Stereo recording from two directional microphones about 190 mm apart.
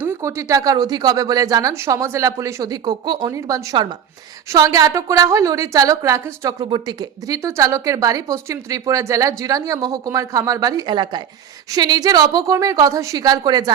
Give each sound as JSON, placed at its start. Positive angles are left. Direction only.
{"t": 0.0, "sound": "a woman's voice", "side_deg": -15}